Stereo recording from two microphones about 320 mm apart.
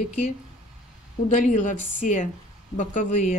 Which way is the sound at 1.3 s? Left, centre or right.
Left.